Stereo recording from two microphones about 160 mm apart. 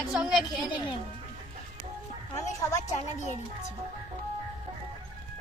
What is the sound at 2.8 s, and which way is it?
Speech, 45° left (ahead or behind).